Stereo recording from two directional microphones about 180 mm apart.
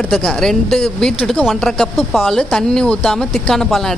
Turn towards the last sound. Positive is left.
turn(degrees=5)  # may be behind; listen again after turning